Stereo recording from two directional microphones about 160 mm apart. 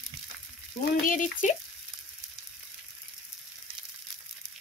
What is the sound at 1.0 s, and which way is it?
Speech, 55° left (ahead or behind).